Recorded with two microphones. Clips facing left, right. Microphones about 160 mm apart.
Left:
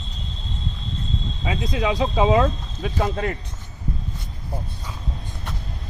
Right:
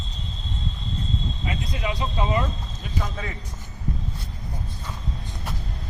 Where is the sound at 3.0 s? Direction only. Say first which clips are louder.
Left 7 dB; 60° left (ahead or behind).